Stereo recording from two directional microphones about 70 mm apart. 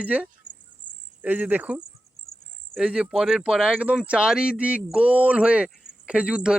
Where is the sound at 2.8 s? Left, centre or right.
Centre.